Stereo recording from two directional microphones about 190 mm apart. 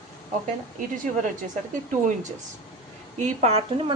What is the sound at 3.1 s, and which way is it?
Speech, 35° right (ahead or behind).